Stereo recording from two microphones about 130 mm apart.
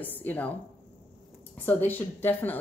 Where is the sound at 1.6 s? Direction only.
15° left (ahead or behind).